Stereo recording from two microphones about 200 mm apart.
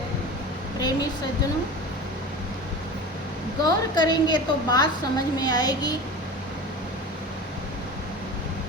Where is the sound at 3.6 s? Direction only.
20° left (ahead or behind).